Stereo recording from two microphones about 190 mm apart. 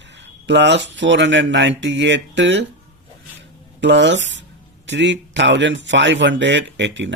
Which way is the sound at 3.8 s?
70° right (ahead or behind).